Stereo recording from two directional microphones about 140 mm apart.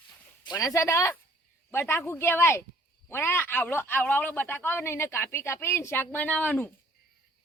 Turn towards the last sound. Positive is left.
turn(degrees=10)  # may be behind; listen again after turning